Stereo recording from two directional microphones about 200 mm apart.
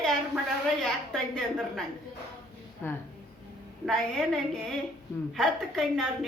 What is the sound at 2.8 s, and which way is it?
A woman's voice, 10° left (ahead or behind).